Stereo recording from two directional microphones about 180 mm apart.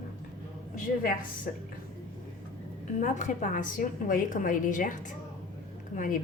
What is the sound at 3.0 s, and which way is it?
A woman's voice, 45° left (ahead or behind).